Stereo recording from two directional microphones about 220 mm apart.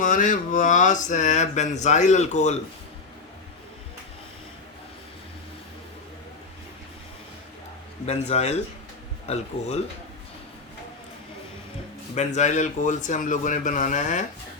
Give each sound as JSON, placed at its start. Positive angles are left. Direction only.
{"t": 0.0, "sound": "speech", "side_deg": 35}
{"t": 8.0, "sound": "speech", "side_deg": 30}
{"t": 12.1, "sound": "speech", "side_deg": 30}